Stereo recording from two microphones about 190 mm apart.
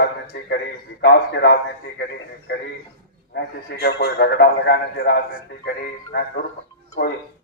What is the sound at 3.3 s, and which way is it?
A man's voice, 60° left (ahead or behind).